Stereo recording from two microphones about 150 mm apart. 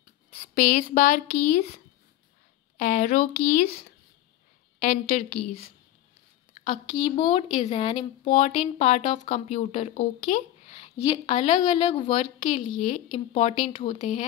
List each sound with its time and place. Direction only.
0.4 s speech: 65° left (ahead or behind)
2.8 s speech: 60° left (ahead or behind)
4.7 s a woman's voice: 55° left (ahead or behind)
6.5 s a sound: 50° left (ahead or behind)
7.0 s speech: 30° left (ahead or behind)
7.5 s speech: 45° left (ahead or behind)